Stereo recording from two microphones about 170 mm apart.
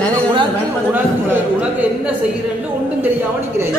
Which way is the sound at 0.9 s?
10° right (ahead or behind).